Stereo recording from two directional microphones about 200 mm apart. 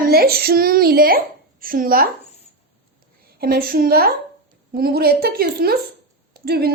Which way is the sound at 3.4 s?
50° right (ahead or behind).